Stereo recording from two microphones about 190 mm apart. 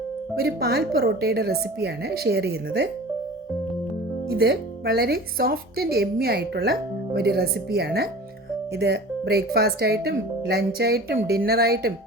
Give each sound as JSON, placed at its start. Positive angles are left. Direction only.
{"t": 0.3, "sound": "speech", "side_deg": -55}
{"t": 4.3, "sound": "speech", "side_deg": -55}